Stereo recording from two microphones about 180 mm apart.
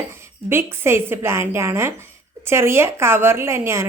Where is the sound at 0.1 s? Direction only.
15° right (ahead or behind).